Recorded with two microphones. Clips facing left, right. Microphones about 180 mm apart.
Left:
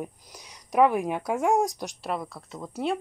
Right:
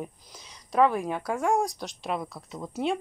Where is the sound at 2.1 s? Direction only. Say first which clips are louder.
Right 2 dB; centre (ahead or behind).